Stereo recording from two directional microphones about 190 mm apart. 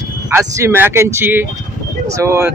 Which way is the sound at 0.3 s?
15° right (ahead or behind).